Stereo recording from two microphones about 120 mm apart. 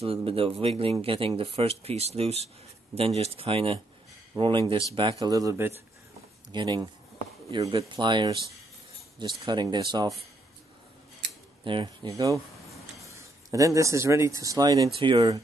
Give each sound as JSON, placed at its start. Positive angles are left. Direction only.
{"t": 0.0, "sound": "speech", "side_deg": -50}
{"t": 5.2, "sound": "speech", "side_deg": -30}
{"t": 6.5, "sound": "speech", "side_deg": -35}
{"t": 11.6, "sound": "speech", "side_deg": -40}
{"t": 12.1, "sound": "speech", "side_deg": -25}
{"t": 14.9, "sound": "speech", "side_deg": -45}
{"t": 15.1, "sound": "speech", "side_deg": -30}